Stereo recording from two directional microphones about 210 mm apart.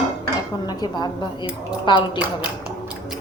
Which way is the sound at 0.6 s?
20° left (ahead or behind).